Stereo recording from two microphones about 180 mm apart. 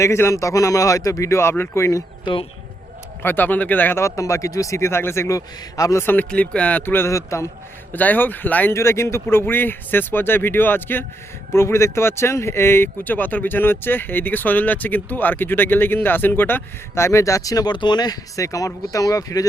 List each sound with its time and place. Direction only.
0.0 s speech: 15° left (ahead or behind)
2.2 s speech: 30° left (ahead or behind)
3.2 s speech: 10° left (ahead or behind)